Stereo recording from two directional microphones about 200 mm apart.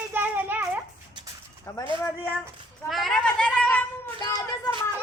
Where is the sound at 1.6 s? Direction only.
20° left (ahead or behind).